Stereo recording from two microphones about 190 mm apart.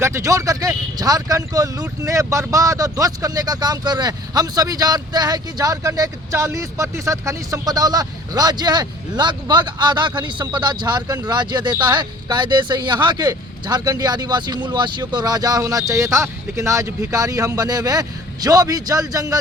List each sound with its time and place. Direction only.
0.0 s speech: 15° right (ahead or behind)